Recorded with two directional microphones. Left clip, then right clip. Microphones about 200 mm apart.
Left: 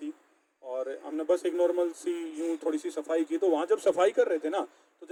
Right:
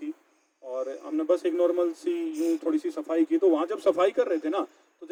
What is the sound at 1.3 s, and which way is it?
Speech, 50° left (ahead or behind).